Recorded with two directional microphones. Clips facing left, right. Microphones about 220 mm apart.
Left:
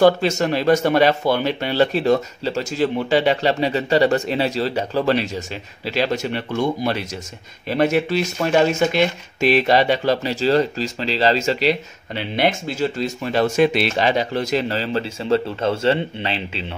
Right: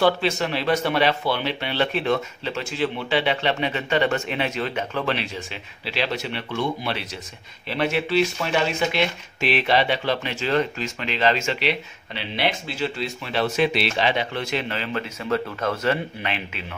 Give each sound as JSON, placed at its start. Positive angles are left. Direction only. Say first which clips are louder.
{"t": 0.0, "sound": "speech", "louder": "left 5 dB", "side_deg": 45}